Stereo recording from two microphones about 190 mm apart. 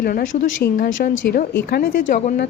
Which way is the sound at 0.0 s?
45° left (ahead or behind).